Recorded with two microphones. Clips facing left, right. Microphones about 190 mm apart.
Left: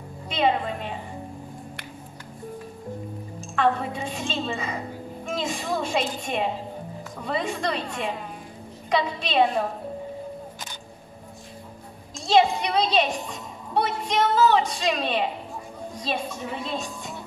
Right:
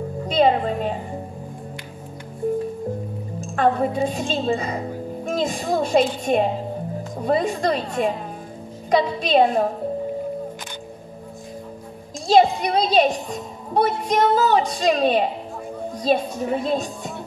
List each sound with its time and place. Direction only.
0.3 s music: 40° right (ahead or behind)
3.3 s a woman's voice: 45° right (ahead or behind)
5.2 s music: 40° right (ahead or behind)
6.2 s a woman's voice: 45° right (ahead or behind)
12.3 s a woman's voice: 40° right (ahead or behind)